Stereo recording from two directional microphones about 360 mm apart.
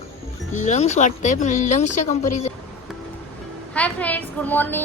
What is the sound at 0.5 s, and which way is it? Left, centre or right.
Speech, centre.